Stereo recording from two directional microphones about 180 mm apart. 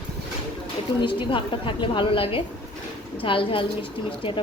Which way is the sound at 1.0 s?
25° left (ahead or behind).